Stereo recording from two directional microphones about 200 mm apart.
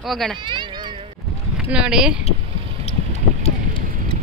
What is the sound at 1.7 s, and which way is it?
Speech, 5° right (ahead or behind).